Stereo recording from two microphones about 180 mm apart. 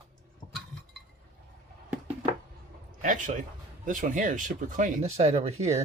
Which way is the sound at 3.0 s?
45° right (ahead or behind).